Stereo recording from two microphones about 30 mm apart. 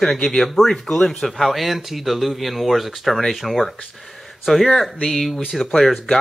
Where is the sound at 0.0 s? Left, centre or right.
Centre.